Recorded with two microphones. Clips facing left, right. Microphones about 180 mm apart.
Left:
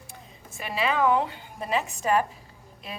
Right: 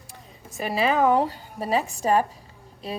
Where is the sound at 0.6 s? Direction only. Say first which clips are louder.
Right 4 dB; 40° right (ahead or behind).